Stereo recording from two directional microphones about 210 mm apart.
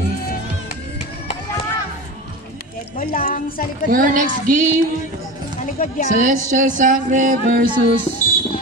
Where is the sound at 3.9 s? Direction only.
40° right (ahead or behind).